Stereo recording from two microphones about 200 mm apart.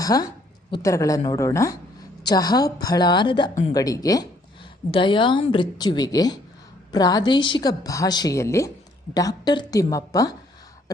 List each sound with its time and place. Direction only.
0.0 s a woman's voice: 20° left (ahead or behind)